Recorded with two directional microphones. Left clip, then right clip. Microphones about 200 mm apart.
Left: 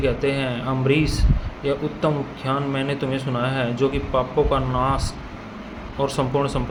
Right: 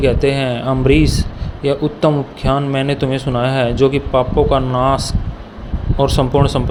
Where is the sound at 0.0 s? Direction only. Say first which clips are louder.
Right 7 dB; 35° right (ahead or behind).